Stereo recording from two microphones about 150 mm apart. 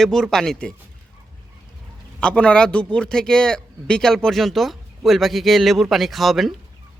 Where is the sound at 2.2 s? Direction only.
5° left (ahead or behind).